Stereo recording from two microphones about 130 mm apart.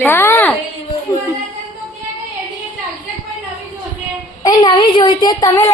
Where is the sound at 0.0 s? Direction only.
15° left (ahead or behind).